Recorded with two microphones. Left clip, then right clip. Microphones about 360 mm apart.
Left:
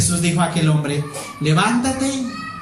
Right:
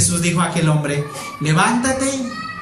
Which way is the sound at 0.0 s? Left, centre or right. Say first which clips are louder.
Right 1 dB; centre.